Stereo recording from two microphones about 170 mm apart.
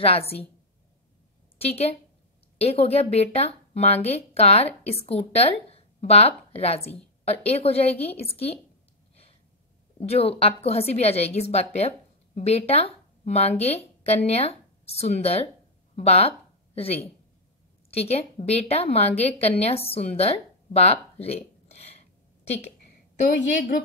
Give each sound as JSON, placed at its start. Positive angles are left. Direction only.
{"t": 0.0, "sound": "a woman's voice", "side_deg": 35}
{"t": 1.6, "sound": "a woman's voice", "side_deg": 35}
{"t": 9.9, "sound": "a woman's voice", "side_deg": 35}
{"t": 23.1, "sound": "a woman's voice", "side_deg": 45}